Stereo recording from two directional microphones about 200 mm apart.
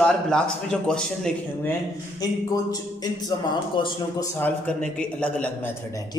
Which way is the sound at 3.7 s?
25° left (ahead or behind).